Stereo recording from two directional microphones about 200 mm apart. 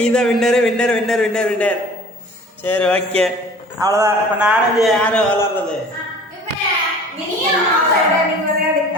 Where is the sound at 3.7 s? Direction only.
15° right (ahead or behind).